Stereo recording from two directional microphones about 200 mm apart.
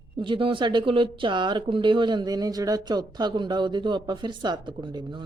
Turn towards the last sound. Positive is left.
turn(degrees=-20)  # may be behind; listen again after turning